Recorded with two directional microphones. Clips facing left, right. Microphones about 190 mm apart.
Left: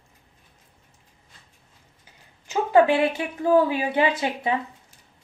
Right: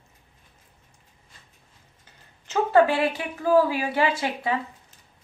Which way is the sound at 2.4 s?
15° left (ahead or behind).